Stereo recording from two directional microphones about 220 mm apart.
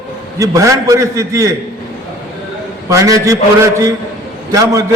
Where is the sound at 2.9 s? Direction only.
15° right (ahead or behind).